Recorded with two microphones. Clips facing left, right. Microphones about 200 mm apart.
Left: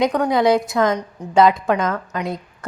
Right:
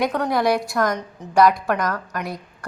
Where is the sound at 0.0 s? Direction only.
15° left (ahead or behind).